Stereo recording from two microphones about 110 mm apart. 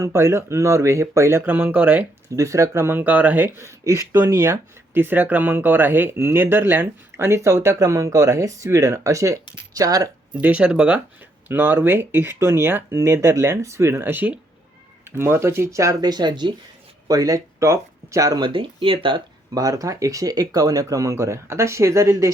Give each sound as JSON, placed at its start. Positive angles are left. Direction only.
{"t": 0.0, "sound": "speech", "side_deg": -25}
{"t": 2.3, "sound": "speech", "side_deg": -30}
{"t": 10.4, "sound": "speech", "side_deg": -10}
{"t": 18.4, "sound": "speech", "side_deg": -50}
{"t": 19.5, "sound": "speech", "side_deg": -30}